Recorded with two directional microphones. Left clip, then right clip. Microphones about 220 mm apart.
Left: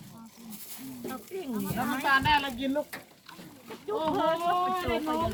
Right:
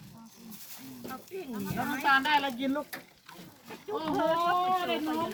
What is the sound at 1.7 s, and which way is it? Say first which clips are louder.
Speech: even; 5° right (ahead or behind).